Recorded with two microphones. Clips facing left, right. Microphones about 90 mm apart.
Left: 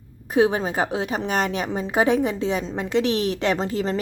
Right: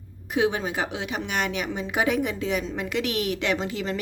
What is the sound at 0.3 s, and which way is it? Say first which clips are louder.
A woman's voice: left 5 dB; 35° left (ahead or behind).